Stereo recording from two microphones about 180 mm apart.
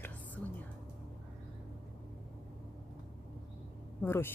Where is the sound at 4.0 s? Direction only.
15° left (ahead or behind).